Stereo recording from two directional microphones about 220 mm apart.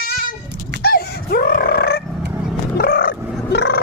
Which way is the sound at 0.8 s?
45° left (ahead or behind).